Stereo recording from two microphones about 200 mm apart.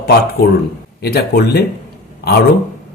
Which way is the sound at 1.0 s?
50° left (ahead or behind).